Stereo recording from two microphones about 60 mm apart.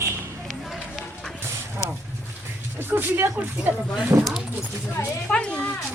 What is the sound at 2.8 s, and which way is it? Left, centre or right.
Speech, right.